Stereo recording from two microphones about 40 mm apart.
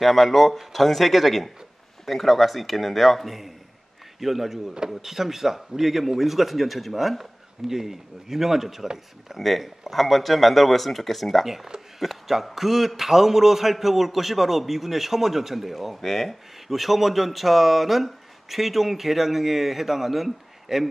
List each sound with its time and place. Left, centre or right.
0.0 s a man's voice: centre
9.4 s a man's voice: centre
11.4 s a man's voice: centre